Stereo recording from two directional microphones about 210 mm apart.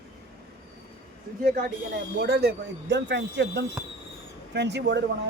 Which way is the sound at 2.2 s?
50° right (ahead or behind).